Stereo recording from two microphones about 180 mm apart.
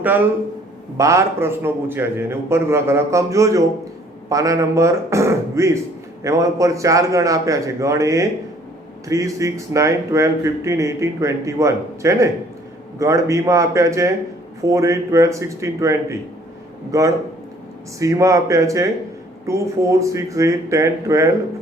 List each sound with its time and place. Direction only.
0.9 s a man's voice: 15° right (ahead or behind)